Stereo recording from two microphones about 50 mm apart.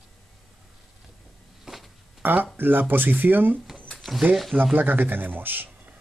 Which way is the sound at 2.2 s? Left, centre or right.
Right.